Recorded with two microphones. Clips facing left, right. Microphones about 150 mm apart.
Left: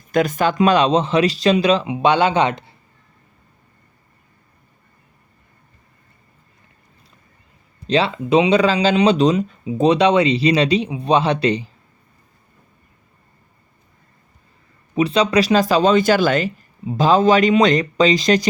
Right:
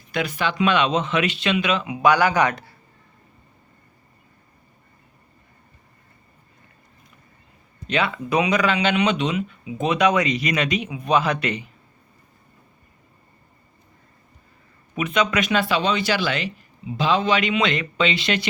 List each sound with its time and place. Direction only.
0.1 s speech: 45° left (ahead or behind); by 2.7 s 20° left (ahead or behind)
7.9 s speech: 30° left (ahead or behind)
14.9 s speech: 30° left (ahead or behind)